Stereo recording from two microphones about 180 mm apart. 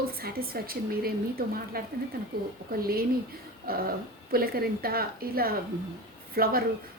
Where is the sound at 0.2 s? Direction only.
55° right (ahead or behind).